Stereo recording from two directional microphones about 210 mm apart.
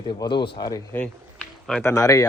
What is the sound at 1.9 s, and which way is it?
Speech, 15° left (ahead or behind).